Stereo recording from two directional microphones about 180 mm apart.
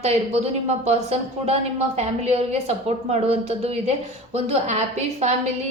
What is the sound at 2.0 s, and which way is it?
A woman's voice, 35° right (ahead or behind).